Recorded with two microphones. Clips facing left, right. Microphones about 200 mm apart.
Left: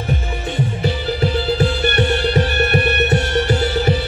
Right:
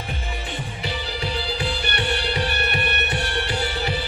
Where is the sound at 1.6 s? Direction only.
45° left (ahead or behind).